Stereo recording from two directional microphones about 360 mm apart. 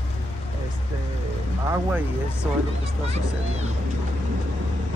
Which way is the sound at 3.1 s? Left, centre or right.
Centre.